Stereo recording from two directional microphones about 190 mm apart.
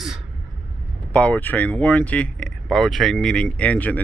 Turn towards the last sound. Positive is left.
turn(degrees=10)  # may be behind; listen again after turning